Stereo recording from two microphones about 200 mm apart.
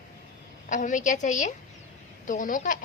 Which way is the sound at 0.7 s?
40° left (ahead or behind).